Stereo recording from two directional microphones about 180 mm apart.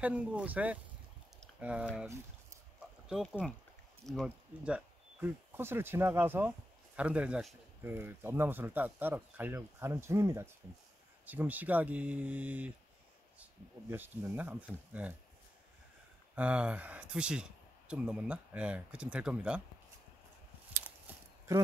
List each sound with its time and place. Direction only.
0.0 s speech: 10° right (ahead or behind)
3.1 s speech: centre (ahead or behind)
16.3 s speech: 5° right (ahead or behind)
21.5 s speech: 15° right (ahead or behind)